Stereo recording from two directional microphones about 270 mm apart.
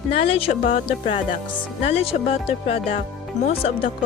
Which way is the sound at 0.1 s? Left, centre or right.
Left.